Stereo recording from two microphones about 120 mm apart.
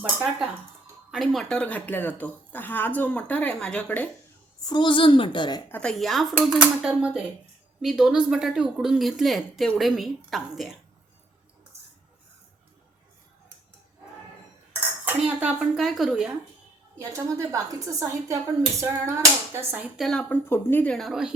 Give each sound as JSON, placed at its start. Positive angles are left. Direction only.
{"t": 0.0, "sound": "speech", "side_deg": -10}
{"t": 4.6, "sound": "a woman's voice", "side_deg": 40}
{"t": 5.7, "sound": "speech", "side_deg": 5}
{"t": 6.3, "sound": "speech", "side_deg": -10}
{"t": 15.0, "sound": "speech", "side_deg": -10}
{"t": 17.0, "sound": "a woman's voice", "side_deg": -25}
{"t": 20.0, "sound": "speech", "side_deg": 5}
{"t": 20.2, "sound": "speech", "side_deg": 20}
{"t": 20.9, "sound": "speech", "side_deg": 0}